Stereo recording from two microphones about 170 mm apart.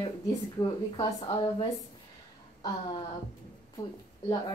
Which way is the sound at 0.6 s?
30° left (ahead or behind).